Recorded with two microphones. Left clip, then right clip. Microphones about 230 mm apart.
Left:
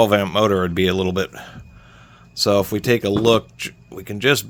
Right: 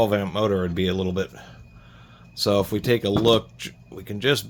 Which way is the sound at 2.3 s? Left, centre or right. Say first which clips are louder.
Left 4 dB; left.